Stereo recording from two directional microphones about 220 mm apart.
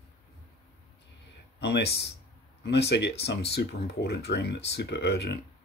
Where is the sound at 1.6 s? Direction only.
50° left (ahead or behind).